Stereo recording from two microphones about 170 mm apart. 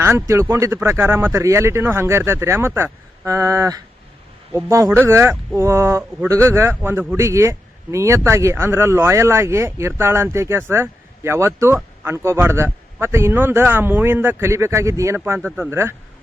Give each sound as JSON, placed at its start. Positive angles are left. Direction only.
{"t": 0.0, "sound": "speech", "side_deg": -15}